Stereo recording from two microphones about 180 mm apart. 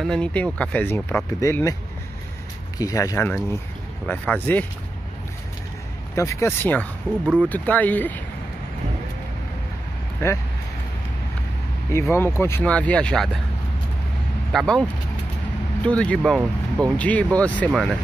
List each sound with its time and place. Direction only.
0.0 s speech: 5° left (ahead or behind)
2.8 s speech: 20° left (ahead or behind)
6.1 s speech: 15° left (ahead or behind)
10.2 s speech: 15° left (ahead or behind)
11.9 s speech: 15° left (ahead or behind)
14.5 s speech: centre (ahead or behind)
17.0 s speech: 5° left (ahead or behind)